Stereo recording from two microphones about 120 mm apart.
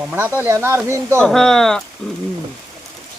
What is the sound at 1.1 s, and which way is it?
Speech, 5° left (ahead or behind).